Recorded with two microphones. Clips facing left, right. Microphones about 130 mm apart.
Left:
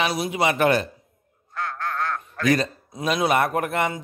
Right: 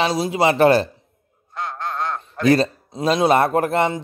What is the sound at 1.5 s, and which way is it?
Speech, 20° right (ahead or behind).